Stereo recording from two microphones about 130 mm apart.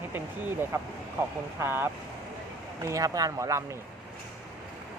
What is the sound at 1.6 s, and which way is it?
Speech, 15° right (ahead or behind).